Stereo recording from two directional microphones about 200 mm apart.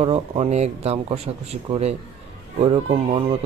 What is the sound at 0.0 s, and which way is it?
Speech, 30° right (ahead or behind).